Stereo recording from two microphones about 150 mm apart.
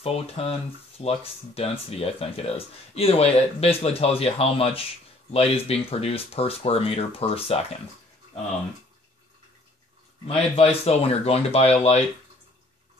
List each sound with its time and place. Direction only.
0.0 s speech: 40° left (ahead or behind)
10.2 s speech: 45° left (ahead or behind)